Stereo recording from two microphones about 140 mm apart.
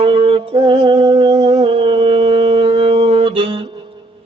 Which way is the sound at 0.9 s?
50° right (ahead or behind).